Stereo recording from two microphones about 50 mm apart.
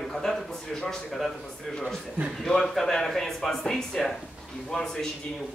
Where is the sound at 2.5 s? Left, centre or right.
Centre.